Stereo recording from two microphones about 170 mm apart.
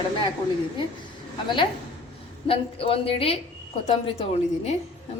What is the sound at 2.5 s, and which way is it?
A woman's voice, 35° left (ahead or behind).